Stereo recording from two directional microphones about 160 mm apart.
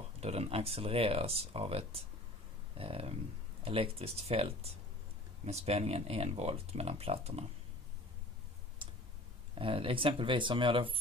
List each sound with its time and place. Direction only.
0.2 s speech: 40° right (ahead or behind)
9.6 s speech: 35° right (ahead or behind)